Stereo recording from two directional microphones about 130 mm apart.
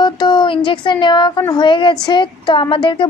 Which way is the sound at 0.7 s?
35° left (ahead or behind).